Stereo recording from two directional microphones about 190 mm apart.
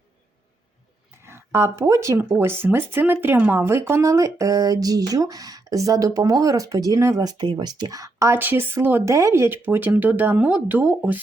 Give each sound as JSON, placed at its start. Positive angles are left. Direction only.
{"t": 1.2, "sound": "speech", "side_deg": -15}